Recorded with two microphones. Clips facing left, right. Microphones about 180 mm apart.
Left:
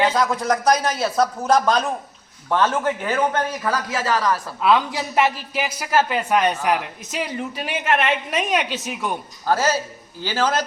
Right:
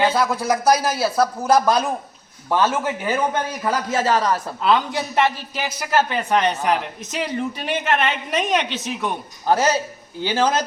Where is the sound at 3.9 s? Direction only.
25° right (ahead or behind).